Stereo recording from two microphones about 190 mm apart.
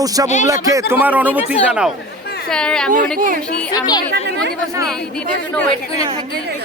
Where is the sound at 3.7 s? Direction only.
20° left (ahead or behind).